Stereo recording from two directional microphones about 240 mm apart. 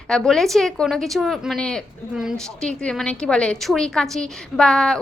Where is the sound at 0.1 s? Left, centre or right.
Centre.